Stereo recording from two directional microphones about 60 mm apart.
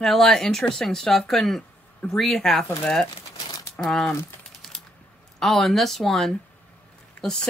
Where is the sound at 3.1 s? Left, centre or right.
Left.